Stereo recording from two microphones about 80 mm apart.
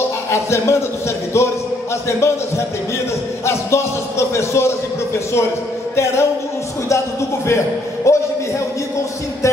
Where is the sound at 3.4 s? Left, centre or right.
Left.